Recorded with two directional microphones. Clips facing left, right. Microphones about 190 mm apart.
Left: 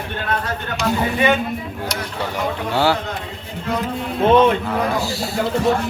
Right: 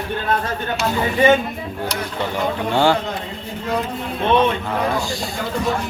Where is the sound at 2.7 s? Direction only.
5° left (ahead or behind).